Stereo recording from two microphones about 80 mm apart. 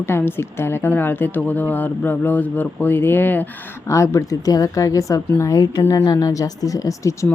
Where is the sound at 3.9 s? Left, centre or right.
Left.